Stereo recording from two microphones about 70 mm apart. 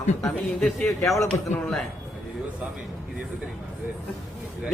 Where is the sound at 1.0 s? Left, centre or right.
Left.